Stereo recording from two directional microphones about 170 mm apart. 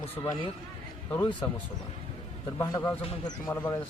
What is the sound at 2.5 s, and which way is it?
A man's voice, 20° left (ahead or behind).